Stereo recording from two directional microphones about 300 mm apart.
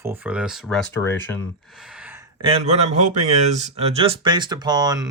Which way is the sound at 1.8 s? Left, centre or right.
Centre.